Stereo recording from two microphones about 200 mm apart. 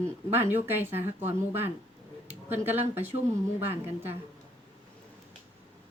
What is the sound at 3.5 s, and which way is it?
Speech, 10° right (ahead or behind).